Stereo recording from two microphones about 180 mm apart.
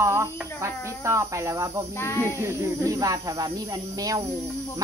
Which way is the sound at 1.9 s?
15° left (ahead or behind).